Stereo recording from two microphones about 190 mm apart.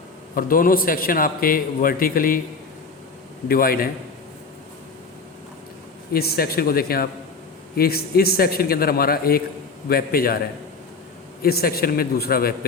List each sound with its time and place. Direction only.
0.3 s a man's voice: 50° left (ahead or behind)
3.5 s a man's voice: 50° left (ahead or behind)
6.1 s a man's voice: 55° left (ahead or behind)
11.4 s a man's voice: 55° left (ahead or behind)